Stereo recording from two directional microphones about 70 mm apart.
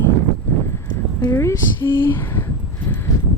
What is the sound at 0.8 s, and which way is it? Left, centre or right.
Clip-clop, left.